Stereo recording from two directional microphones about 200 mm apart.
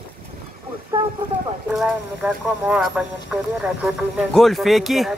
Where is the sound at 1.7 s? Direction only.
5° right (ahead or behind).